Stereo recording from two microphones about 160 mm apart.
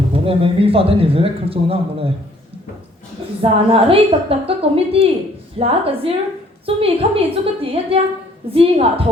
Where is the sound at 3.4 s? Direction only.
35° right (ahead or behind).